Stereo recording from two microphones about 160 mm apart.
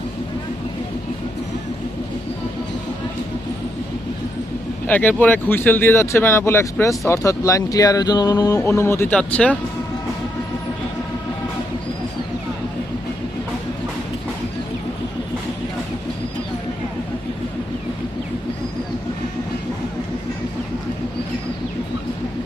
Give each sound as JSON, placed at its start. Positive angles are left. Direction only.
{"t": 4.9, "sound": "speech", "side_deg": 10}